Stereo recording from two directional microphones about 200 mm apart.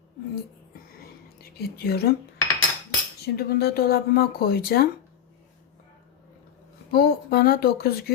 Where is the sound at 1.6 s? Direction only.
50° left (ahead or behind).